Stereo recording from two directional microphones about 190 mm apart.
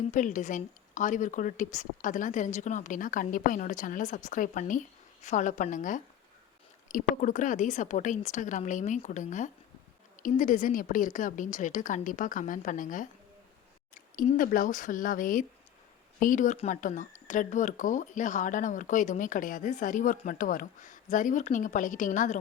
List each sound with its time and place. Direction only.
0.0 s a woman's voice: 40° left (ahead or behind)